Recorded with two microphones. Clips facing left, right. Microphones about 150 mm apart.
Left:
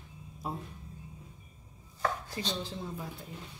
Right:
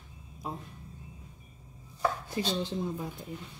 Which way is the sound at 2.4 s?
20° right (ahead or behind).